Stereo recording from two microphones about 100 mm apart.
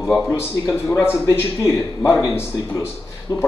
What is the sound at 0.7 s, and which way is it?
A man's voice, 25° left (ahead or behind).